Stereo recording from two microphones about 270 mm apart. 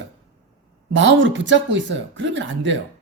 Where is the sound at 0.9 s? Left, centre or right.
Right.